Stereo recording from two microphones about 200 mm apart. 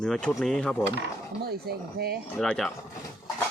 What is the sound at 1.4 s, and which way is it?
Speech, 50° right (ahead or behind).